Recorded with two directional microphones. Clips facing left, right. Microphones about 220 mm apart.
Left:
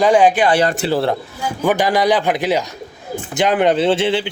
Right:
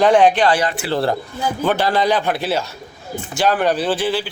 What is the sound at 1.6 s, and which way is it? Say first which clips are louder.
Speech: left 3 dB; 15° left (ahead or behind).